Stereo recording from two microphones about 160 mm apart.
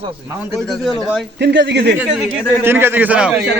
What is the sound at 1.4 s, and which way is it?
Speech, 90° right.